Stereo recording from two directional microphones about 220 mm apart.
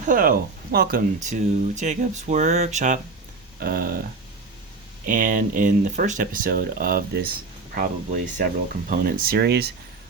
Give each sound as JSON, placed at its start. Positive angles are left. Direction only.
{"t": 0.1, "sound": "speech", "side_deg": -40}
{"t": 3.6, "sound": "speech", "side_deg": -45}
{"t": 5.0, "sound": "speech", "side_deg": -35}